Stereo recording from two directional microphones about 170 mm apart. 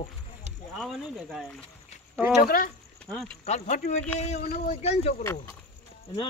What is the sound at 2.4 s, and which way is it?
Speech, 55° left (ahead or behind).